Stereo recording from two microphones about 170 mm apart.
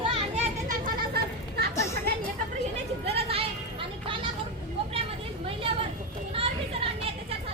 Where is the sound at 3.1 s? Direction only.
35° right (ahead or behind).